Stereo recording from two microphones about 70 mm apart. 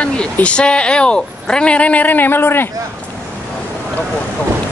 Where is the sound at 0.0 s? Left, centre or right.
Centre; by 2.7 s left.